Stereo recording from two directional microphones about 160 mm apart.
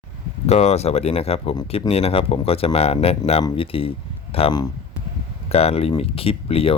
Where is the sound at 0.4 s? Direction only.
45° left (ahead or behind).